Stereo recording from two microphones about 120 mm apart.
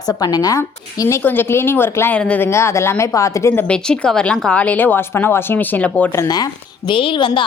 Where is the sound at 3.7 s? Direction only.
5° left (ahead or behind).